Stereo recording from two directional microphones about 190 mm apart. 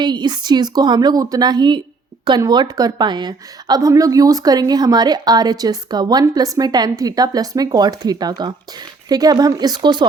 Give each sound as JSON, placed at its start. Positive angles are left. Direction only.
{"t": 0.0, "sound": "a woman's voice", "side_deg": -20}